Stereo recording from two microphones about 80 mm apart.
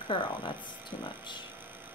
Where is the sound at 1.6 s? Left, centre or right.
Right.